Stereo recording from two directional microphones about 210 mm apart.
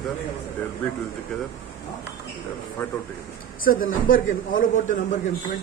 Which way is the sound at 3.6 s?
40° left (ahead or behind).